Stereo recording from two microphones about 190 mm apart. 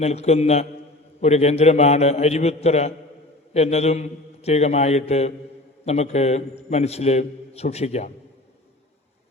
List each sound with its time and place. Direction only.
0.0 s a man's voice: 35° left (ahead or behind)